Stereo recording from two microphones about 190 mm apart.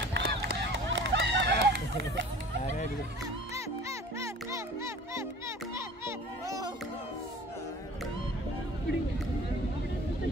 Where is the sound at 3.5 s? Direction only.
15° right (ahead or behind).